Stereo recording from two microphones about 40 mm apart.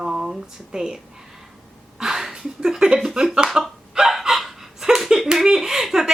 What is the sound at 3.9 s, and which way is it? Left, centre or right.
Hiccup, centre.